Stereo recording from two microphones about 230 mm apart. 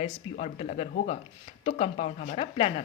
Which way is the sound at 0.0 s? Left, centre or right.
Left.